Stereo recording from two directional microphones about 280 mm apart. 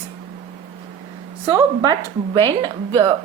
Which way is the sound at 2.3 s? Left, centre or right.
Centre.